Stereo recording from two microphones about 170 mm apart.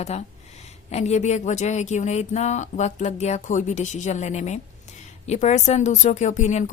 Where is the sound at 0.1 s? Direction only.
40° left (ahead or behind).